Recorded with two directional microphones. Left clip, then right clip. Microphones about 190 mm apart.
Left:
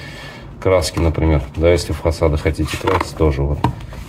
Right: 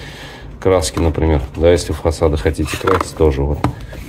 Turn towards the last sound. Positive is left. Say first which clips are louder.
# right 3 dB
turn(degrees=-20)  # may be behind; listen again after turning